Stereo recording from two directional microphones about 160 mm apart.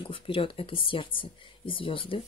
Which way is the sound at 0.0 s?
35° left (ahead or behind).